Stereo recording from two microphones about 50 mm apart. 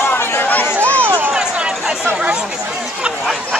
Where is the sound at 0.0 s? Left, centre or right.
Left.